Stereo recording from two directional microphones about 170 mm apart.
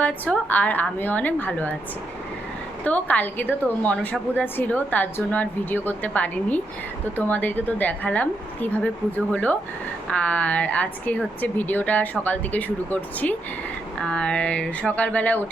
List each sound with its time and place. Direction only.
0.0 s speech: 10° left (ahead or behind)
2.8 s speech: 10° left (ahead or behind)